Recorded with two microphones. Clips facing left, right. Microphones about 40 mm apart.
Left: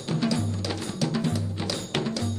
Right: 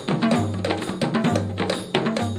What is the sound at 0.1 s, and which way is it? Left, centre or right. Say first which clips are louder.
Music: right 6 dB; right.